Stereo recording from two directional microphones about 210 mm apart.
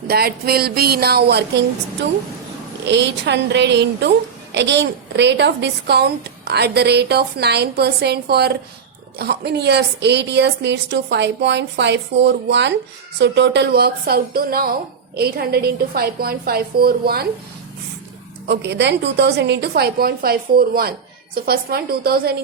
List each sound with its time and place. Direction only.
0.1 s speech: 45° right (ahead or behind)
2.8 s a woman's voice: 55° right (ahead or behind)
18.4 s speech: 55° right (ahead or behind)